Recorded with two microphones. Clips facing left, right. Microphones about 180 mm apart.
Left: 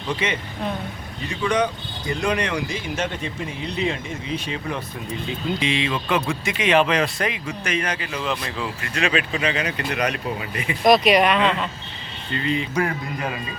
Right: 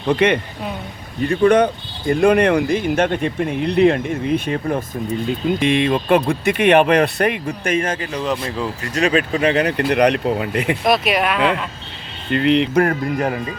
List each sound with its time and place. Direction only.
0.0 s speech: 60° right (ahead or behind)
10.8 s speech: 5° right (ahead or behind)
12.3 s speech: 70° right (ahead or behind); by 13.4 s 50° right (ahead or behind)